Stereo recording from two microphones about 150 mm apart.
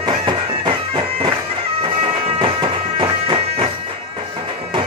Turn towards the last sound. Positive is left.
turn(degrees=-35)  # may be behind; listen again after turning